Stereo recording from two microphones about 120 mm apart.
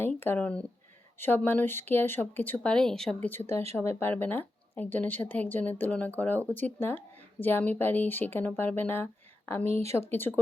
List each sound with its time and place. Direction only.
0.2 s speech: 15° left (ahead or behind)